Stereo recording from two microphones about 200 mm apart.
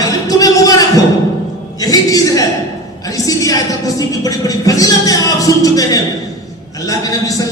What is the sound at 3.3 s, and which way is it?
A man's voice, 15° left (ahead or behind).